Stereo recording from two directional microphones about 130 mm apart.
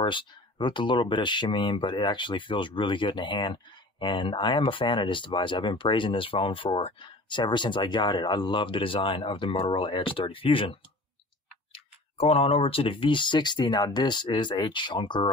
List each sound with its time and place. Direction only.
0.0 s speech: 40° left (ahead or behind)